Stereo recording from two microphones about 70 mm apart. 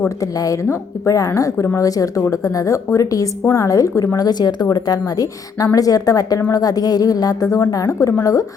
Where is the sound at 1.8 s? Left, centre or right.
Left.